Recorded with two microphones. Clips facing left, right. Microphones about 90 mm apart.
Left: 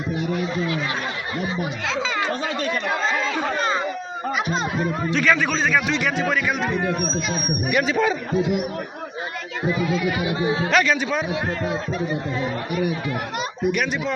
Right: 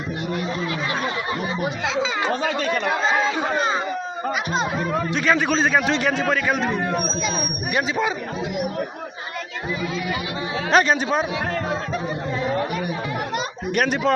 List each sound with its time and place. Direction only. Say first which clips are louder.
2.9 s speech: right 2 dB; 10° right (ahead or behind)
5.1 s a man's voice: even; 25° right (ahead or behind)
7.7 s a man's voice: left 2 dB; 25° right (ahead or behind)
10.7 s speech: right 5 dB; 30° right (ahead or behind)
13.7 s speech: right 2 dB; 45° right (ahead or behind)